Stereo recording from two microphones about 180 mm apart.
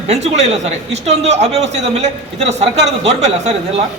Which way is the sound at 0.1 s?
40° right (ahead or behind).